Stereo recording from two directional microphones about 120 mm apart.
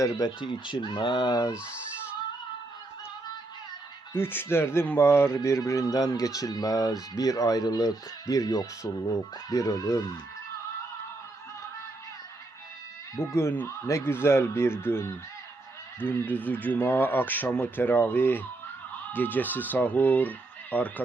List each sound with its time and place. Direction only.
0.3 s speech: 45° left (ahead or behind)
4.1 s speech: 20° left (ahead or behind)
13.1 s speech: 20° left (ahead or behind)